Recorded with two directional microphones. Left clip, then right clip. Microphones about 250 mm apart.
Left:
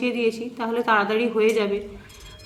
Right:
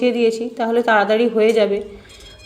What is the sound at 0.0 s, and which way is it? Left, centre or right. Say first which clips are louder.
A woman's voice: right 7 dB; centre.